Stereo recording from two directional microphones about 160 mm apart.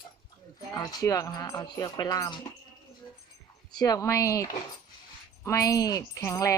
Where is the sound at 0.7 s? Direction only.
25° left (ahead or behind).